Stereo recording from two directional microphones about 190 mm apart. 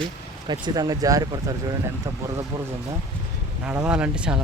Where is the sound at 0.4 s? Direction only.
25° right (ahead or behind).